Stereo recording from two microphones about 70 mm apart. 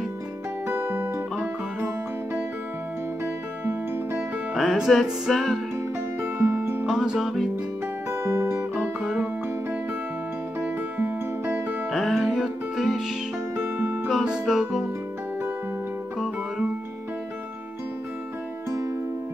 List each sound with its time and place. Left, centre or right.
0.7 s music: right
3.6 s music: right
4.6 s music: centre
6.2 s music: right
6.9 s music: centre
8.1 s guitar: right
11.0 s music: right
11.9 s music: centre
13.6 s music: right
14.0 s music: centre